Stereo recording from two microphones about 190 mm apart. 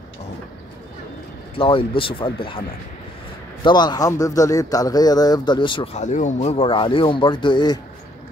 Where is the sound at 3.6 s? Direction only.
20° left (ahead or behind).